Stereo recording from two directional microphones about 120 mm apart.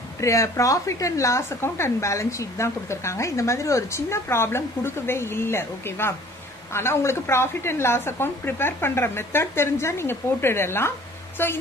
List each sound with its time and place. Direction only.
0.2 s speech: 25° left (ahead or behind)